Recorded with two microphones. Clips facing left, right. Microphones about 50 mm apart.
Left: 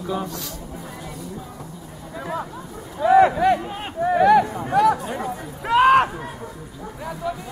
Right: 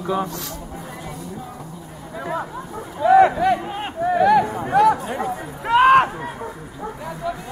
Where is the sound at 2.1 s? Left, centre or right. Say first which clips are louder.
Right 2 dB; centre.